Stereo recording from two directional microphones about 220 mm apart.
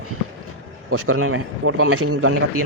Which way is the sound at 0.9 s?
75° right (ahead or behind).